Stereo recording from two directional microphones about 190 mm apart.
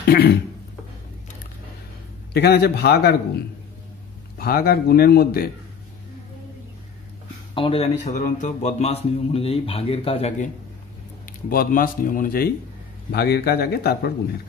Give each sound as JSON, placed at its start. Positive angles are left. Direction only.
{"t": 0.1, "sound": "speech", "side_deg": 55}
{"t": 2.3, "sound": "speech", "side_deg": 60}
{"t": 4.4, "sound": "speech", "side_deg": 50}
{"t": 7.5, "sound": "a man's voice", "side_deg": 30}
{"t": 11.2, "sound": "speech", "side_deg": 50}